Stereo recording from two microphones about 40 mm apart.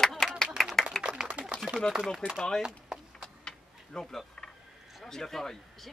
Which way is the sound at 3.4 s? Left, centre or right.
Centre.